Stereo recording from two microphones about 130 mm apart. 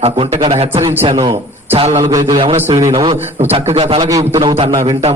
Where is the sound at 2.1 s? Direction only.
35° right (ahead or behind).